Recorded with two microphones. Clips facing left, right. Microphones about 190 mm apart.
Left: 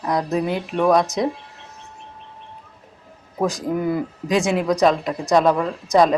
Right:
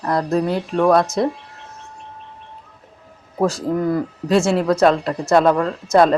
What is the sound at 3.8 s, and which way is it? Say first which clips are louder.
Speech: right 2 dB; 5° left (ahead or behind).